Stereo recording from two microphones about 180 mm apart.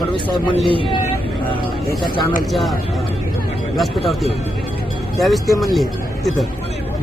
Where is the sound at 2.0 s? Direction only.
25° left (ahead or behind).